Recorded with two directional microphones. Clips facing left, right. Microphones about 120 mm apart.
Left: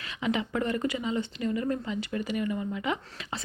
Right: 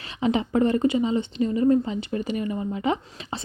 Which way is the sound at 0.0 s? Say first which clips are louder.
Right 6 dB; 30° right (ahead or behind).